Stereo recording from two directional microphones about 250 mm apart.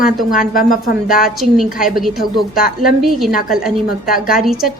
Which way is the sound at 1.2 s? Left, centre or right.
Centre.